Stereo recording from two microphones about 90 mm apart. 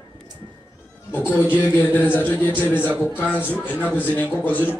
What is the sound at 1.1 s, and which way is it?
A man's voice, 20° left (ahead or behind).